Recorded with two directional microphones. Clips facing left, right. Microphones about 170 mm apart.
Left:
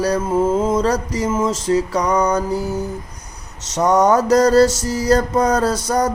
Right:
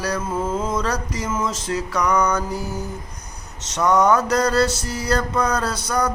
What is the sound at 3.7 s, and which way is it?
Mantra, 40° left (ahead or behind).